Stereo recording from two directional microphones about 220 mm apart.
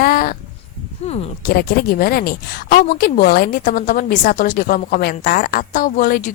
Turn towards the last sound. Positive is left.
turn(degrees=40)  # may be behind; listen again after turning